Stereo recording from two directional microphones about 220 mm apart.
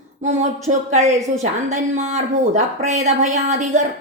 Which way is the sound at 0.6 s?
30° right (ahead or behind).